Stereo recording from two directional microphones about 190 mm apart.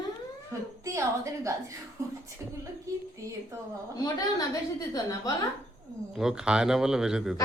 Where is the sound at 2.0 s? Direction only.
15° right (ahead or behind).